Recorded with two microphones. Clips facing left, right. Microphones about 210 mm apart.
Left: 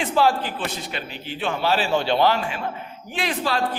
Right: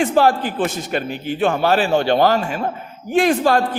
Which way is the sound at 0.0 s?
50° right (ahead or behind).